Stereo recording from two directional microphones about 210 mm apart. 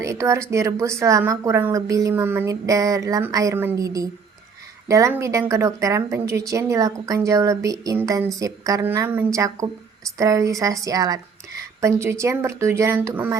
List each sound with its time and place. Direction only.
0.0 s speech: 15° right (ahead or behind)